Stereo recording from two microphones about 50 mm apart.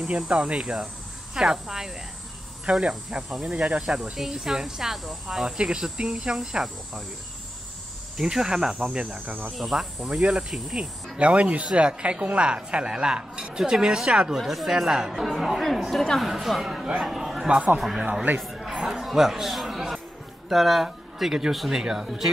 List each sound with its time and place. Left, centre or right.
0.3 s speech: right
1.3 s speech: centre
3.5 s speech: centre
5.6 s speech: centre
8.2 s speech: centre
9.5 s speech: centre
11.1 s speech: right
14.4 s speech: centre
17.5 s speech: right
17.7 s speech: centre
18.4 s a sound: centre
20.4 s speech: centre